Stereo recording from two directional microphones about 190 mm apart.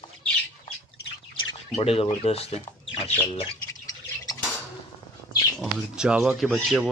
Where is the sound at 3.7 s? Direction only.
20° left (ahead or behind).